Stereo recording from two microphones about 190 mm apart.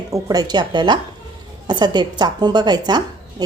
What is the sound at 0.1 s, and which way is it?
A woman's voice, 20° right (ahead or behind).